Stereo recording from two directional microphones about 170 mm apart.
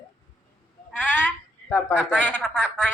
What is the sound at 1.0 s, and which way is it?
Speech, 10° left (ahead or behind).